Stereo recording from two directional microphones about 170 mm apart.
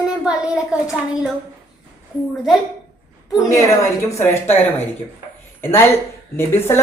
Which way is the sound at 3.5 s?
20° left (ahead or behind).